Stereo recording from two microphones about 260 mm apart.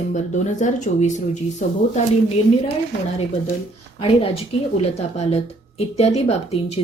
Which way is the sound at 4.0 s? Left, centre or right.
Left.